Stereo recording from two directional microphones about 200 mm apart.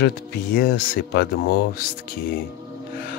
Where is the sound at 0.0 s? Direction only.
50° left (ahead or behind).